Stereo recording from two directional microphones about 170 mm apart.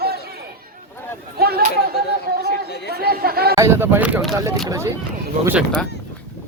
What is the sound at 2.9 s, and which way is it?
Chatter, 65° right (ahead or behind).